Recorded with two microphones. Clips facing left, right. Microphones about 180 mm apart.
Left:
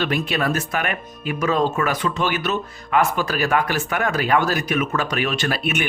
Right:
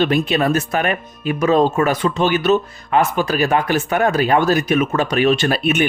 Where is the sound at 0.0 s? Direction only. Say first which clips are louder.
Right 6 dB; 25° right (ahead or behind).